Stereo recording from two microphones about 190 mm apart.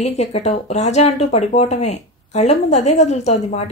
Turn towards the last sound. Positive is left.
turn(degrees=35)  # may be behind; listen again after turning